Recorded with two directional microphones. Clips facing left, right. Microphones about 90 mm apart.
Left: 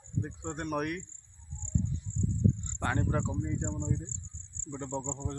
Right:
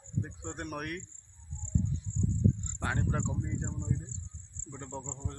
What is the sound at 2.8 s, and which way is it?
Speech, centre (ahead or behind).